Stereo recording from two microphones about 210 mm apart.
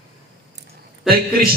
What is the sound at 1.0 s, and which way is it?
Speech, 45° right (ahead or behind).